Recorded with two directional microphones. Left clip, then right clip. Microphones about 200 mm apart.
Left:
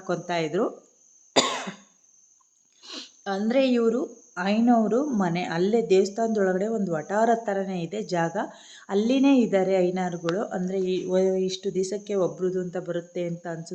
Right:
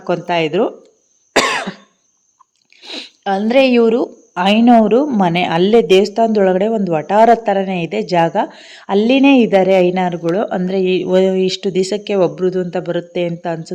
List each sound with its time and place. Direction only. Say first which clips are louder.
0.0 s a woman's voice: right 11 dB; 20° right (ahead or behind)
2.8 s a woman's voice: right 12 dB; 10° right (ahead or behind); by 13.7 s 30° right (ahead or behind)